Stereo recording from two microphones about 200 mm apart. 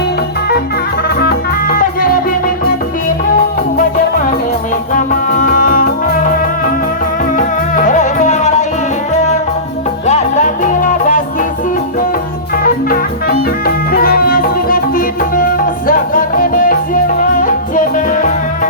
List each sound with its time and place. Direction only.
1.0 s music: 50° left (ahead or behind)
4.9 s music: 40° left (ahead or behind)
10.1 s music: 35° left (ahead or behind)
12.6 s music: 45° left (ahead or behind)